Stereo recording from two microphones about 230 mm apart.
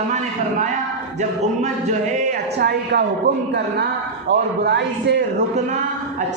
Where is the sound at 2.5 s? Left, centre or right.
Right.